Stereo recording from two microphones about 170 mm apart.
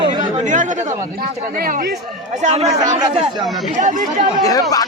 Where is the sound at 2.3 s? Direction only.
40° right (ahead or behind).